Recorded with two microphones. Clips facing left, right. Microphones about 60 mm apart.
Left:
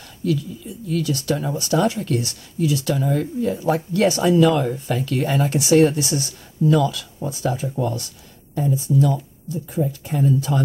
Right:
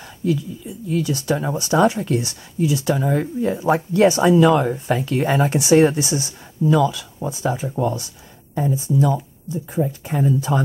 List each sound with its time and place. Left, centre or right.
0.2 s speech: right